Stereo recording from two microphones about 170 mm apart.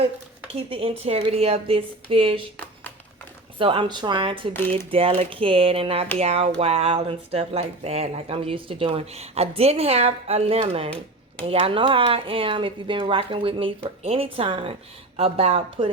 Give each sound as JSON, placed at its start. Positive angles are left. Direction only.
{"t": 0.5, "sound": "speech", "side_deg": -35}
{"t": 3.6, "sound": "a woman's voice", "side_deg": -30}
{"t": 4.5, "sound": "speech", "side_deg": 10}
{"t": 4.9, "sound": "speech", "side_deg": -35}